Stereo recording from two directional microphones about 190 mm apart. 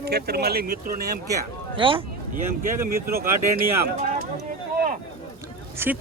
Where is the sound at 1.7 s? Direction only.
25° right (ahead or behind).